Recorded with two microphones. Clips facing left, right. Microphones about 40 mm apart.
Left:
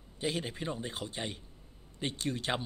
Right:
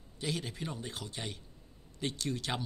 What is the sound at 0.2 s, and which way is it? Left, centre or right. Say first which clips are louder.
Speech: left 3 dB; left.